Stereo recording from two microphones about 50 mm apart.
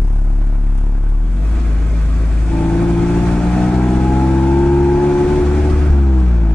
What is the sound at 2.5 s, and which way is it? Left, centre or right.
Vehicle, left.